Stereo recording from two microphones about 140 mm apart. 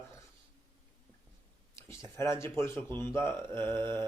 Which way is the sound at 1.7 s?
20° left (ahead or behind).